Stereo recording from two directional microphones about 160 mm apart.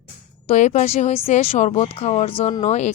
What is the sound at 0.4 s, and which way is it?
Speech, 45° left (ahead or behind).